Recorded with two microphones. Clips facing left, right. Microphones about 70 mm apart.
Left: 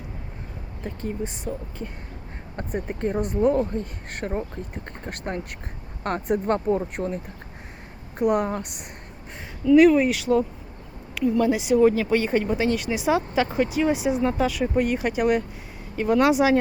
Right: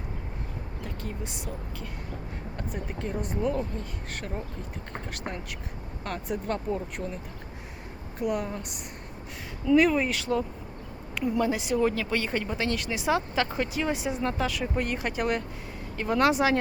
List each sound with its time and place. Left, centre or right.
1.5 s speech: centre
2.6 s speech: left
8.2 s speech: left
9.7 s speech: centre
11.2 s speech: centre
11.5 s speech: centre